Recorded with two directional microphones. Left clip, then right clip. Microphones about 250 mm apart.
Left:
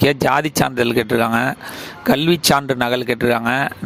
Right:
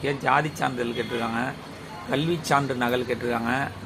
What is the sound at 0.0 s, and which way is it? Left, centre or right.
Speech, left.